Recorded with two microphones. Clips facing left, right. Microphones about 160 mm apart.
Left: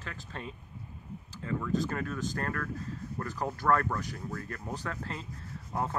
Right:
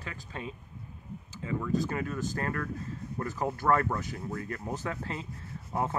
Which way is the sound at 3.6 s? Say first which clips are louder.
Right 1 dB; 20° right (ahead or behind).